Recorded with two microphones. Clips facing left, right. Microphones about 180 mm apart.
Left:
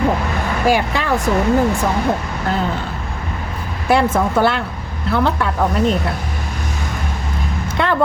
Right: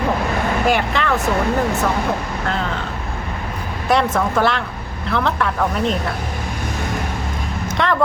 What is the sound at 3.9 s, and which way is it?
A woman's voice, 10° left (ahead or behind).